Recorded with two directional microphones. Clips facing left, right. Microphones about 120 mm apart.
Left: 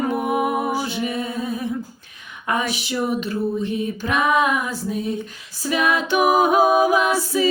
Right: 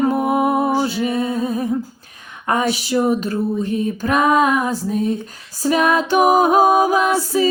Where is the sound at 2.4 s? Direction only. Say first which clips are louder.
Right 4 dB; 40° right (ahead or behind).